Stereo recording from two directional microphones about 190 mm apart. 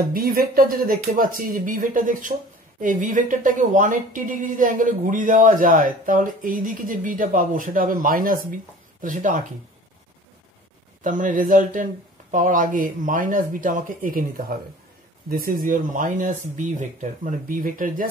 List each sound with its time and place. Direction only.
0.1 s a woman's voice: 50° right (ahead or behind)
11.1 s a woman's voice: 45° right (ahead or behind)